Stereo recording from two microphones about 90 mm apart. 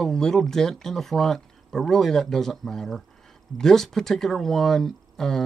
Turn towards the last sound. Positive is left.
turn(degrees=5)  # may be behind; listen again after turning